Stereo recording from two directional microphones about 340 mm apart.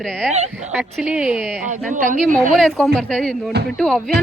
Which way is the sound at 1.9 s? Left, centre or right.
Right.